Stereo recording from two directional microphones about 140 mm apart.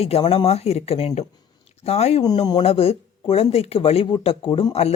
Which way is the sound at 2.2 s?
30° left (ahead or behind).